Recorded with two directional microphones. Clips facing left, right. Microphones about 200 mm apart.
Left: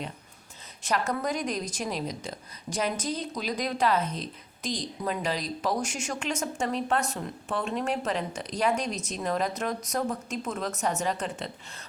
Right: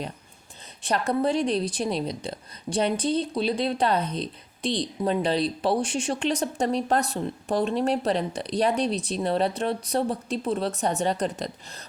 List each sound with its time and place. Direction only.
0.9 s a woman's voice: 35° right (ahead or behind)